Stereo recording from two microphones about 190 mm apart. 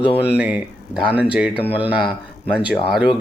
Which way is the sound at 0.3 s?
5° right (ahead or behind).